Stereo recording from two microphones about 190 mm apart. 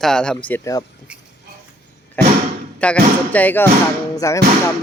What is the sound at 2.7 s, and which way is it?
Speech, 5° left (ahead or behind).